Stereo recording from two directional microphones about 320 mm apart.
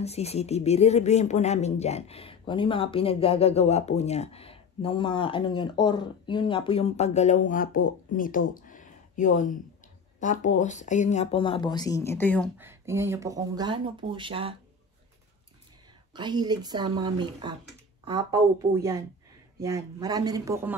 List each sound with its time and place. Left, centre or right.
0.0 s speech: centre
8.5 s a sound: left
10.2 s speech: left; by 12.4 s centre
12.5 s speech: centre
16.2 s speech: centre